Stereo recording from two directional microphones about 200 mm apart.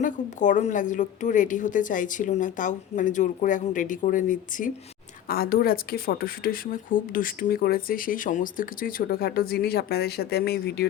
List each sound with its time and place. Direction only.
0.0 s a woman's voice: 40° left (ahead or behind)